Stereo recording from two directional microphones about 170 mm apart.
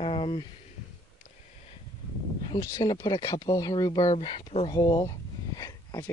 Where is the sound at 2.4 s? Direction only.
25° left (ahead or behind).